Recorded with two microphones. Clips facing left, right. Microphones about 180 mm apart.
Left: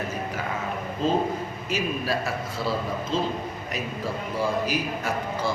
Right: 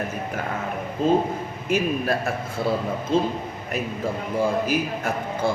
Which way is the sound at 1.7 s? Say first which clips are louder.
Right 5 dB; 50° right (ahead or behind).